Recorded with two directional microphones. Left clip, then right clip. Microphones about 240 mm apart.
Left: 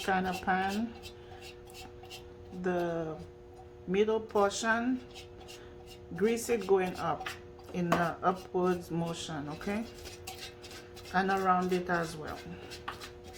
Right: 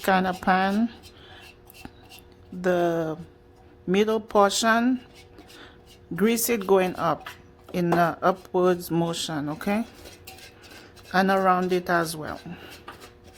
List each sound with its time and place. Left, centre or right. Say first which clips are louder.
0.0 s speech: right 9 dB; right
2.6 s speech: right 10 dB; right
6.1 s speech: right 6 dB; right
11.1 s speech: right 7 dB; right